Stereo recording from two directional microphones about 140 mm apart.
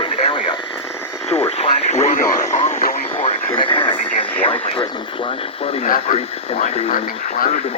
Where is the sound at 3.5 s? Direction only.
40° left (ahead or behind).